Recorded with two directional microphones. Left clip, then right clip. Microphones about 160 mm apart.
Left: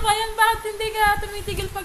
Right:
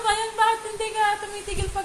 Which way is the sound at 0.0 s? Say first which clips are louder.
Left 2 dB; 30° left (ahead or behind).